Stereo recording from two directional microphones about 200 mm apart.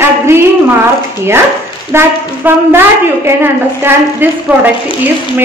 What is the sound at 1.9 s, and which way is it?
Speech, 10° right (ahead or behind).